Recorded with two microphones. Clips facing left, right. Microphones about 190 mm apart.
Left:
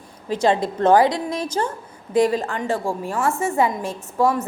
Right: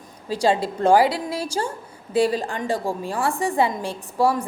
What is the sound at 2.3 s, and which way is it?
A woman's voice, 35° right (ahead or behind).